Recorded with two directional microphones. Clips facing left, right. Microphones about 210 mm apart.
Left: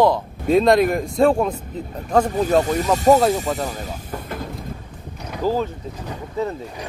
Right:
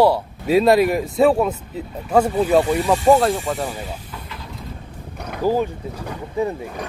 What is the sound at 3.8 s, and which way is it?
Vehicle, 45° left (ahead or behind).